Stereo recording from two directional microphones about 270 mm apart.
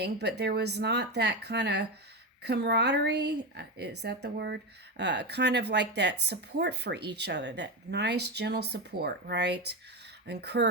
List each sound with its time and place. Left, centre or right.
0.0 s speech: right